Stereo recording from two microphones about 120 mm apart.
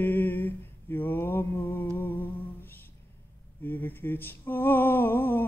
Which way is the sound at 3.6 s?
15° left (ahead or behind).